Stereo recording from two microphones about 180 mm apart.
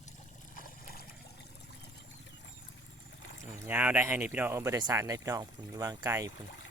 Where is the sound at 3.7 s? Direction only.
10° right (ahead or behind).